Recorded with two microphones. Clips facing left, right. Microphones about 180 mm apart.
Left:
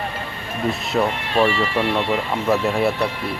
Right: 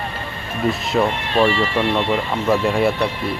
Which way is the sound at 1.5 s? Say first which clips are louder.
Right 2 dB; 30° right (ahead or behind).